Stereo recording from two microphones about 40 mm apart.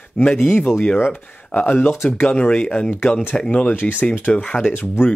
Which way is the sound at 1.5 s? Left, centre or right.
Left.